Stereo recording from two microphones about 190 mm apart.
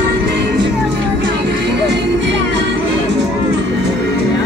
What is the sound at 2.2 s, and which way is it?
Music, 70° right (ahead or behind).